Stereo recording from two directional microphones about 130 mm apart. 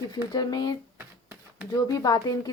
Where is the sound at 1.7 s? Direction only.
30° left (ahead or behind).